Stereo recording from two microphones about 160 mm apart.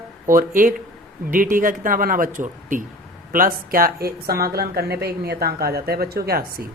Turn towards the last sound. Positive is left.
turn(degrees=-70)  # may be behind; listen again after turning